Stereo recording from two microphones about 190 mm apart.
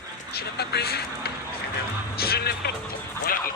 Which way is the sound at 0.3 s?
60° left (ahead or behind).